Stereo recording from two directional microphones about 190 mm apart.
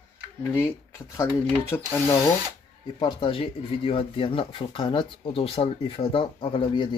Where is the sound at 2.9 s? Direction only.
25° left (ahead or behind).